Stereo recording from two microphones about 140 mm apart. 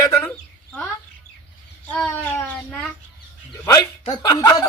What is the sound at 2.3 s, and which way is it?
Speech, 10° left (ahead or behind).